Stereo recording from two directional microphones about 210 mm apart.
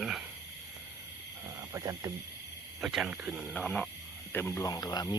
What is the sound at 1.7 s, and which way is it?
Speech, 15° right (ahead or behind).